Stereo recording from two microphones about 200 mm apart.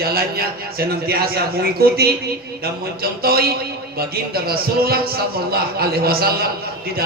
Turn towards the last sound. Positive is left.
turn(degrees=-50)  # may be behind; listen again after turning